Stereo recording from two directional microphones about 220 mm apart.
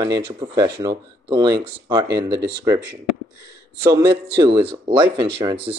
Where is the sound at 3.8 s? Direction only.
15° right (ahead or behind).